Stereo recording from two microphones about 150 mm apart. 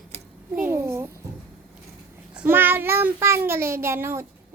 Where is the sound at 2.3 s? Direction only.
10° right (ahead or behind).